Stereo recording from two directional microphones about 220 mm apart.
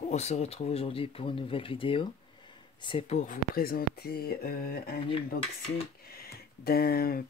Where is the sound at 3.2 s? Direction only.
40° left (ahead or behind).